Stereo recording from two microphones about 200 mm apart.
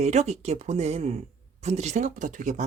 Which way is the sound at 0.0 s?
35° right (ahead or behind).